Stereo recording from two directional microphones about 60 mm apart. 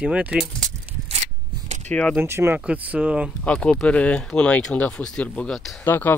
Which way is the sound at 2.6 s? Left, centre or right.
Right.